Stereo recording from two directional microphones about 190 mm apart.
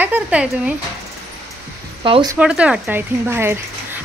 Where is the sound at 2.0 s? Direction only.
25° right (ahead or behind).